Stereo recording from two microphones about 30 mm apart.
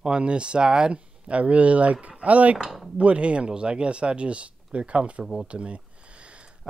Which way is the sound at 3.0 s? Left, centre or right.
Right.